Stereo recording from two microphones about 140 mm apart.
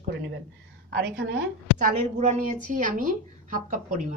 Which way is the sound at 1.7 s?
60° right (ahead or behind).